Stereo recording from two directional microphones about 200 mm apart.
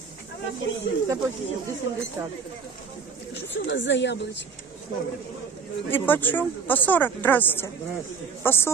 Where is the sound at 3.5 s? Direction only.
65° left (ahead or behind).